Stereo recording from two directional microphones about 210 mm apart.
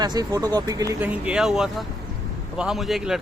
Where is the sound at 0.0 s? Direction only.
20° right (ahead or behind).